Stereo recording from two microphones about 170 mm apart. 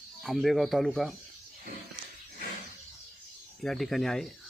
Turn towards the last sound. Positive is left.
turn(degrees=0)  # may be behind; listen again after turning